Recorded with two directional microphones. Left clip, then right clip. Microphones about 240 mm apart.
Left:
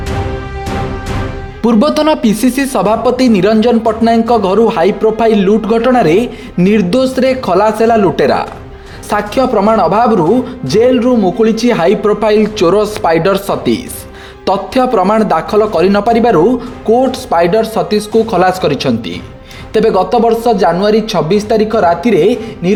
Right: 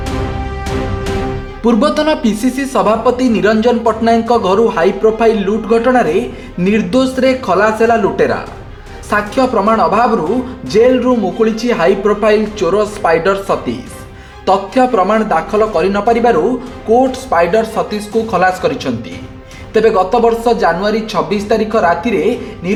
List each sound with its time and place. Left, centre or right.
1.6 s speech: left